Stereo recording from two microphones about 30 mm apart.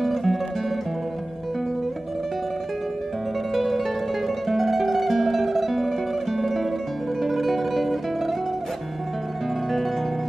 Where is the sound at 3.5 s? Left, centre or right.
Centre.